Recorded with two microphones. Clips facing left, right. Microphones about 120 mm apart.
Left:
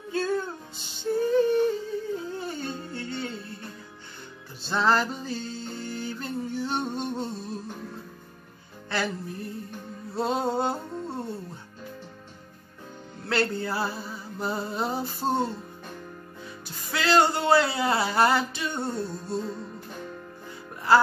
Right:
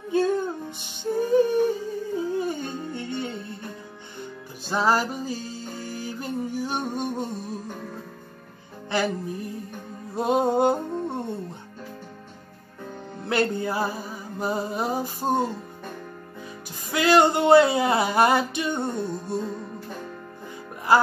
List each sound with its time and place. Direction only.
0.1 s music: 15° right (ahead or behind)
4.6 s music: 10° right (ahead or behind)
8.9 s music: 15° right (ahead or behind)
13.2 s music: 15° right (ahead or behind)
16.9 s a sound: 15° right (ahead or behind)
20.9 s music: 15° right (ahead or behind)